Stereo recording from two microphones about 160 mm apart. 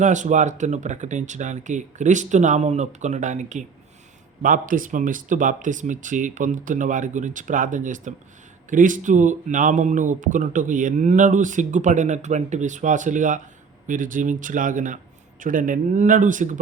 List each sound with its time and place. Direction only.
0.0 s speech: 50° right (ahead or behind)